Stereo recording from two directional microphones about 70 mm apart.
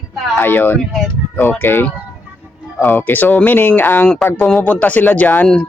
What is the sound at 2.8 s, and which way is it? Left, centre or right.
Speech, left.